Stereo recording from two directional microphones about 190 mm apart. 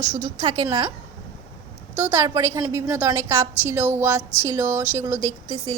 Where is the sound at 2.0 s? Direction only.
15° right (ahead or behind).